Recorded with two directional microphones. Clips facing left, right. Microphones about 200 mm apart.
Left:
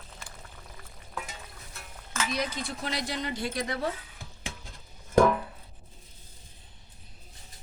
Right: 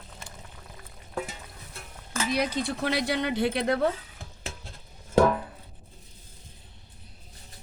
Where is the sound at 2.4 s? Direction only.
60° right (ahead or behind).